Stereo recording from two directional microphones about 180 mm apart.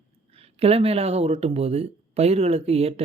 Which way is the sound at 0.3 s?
35° right (ahead or behind).